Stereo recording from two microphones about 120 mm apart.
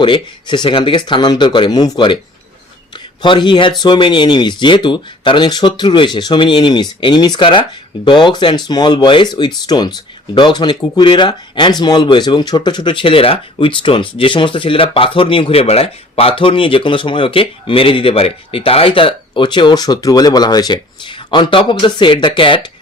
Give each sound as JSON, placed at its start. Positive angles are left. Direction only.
{"t": 0.0, "sound": "speech", "side_deg": 40}